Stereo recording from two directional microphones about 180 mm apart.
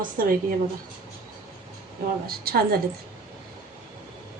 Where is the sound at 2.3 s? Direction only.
55° right (ahead or behind).